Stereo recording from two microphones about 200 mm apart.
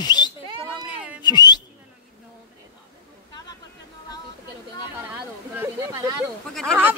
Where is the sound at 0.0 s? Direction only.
20° left (ahead or behind).